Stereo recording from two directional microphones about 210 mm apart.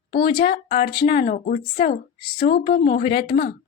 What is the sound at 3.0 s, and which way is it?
Speech, 25° left (ahead or behind).